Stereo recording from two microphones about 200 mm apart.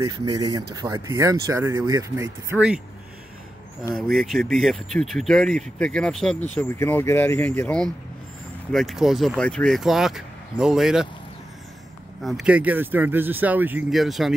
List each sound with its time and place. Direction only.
0.2 s speech: 20° right (ahead or behind)
3.9 s speech: centre (ahead or behind)
12.2 s speech: centre (ahead or behind)